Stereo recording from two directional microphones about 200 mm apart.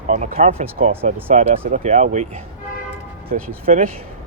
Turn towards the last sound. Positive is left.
turn(degrees=-35)  # may be behind; listen again after turning